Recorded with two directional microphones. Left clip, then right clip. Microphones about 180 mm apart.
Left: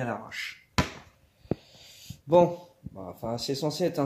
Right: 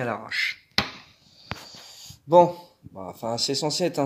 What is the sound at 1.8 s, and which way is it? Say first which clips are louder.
Speech: right 4 dB; 15° right (ahead or behind).